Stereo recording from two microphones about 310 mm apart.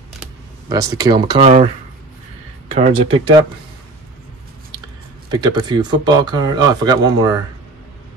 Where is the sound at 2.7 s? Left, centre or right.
Centre.